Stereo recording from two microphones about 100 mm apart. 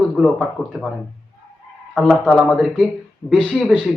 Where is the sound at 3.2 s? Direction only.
25° left (ahead or behind).